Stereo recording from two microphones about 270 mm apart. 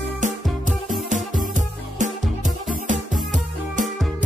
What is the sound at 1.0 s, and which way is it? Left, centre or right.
Music, right.